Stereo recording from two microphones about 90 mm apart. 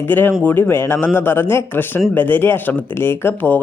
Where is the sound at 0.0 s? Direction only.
20° left (ahead or behind).